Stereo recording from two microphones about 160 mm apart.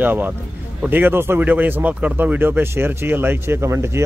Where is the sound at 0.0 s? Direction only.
10° right (ahead or behind).